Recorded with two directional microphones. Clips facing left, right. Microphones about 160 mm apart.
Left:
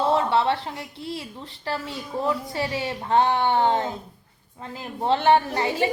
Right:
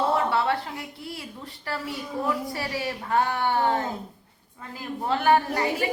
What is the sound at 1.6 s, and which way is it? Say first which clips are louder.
A woman's voice: left 2 dB; 25° left (ahead or behind).